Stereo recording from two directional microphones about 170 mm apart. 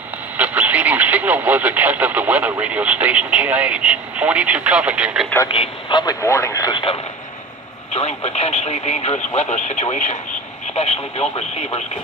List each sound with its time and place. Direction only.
0.4 s speech: 10° right (ahead or behind)
5.5 s speech: 30° left (ahead or behind)